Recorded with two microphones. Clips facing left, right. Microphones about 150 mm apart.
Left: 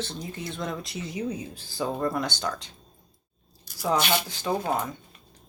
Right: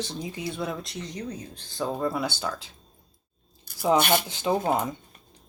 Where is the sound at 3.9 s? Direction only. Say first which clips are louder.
Right 3 dB; 50° right (ahead or behind).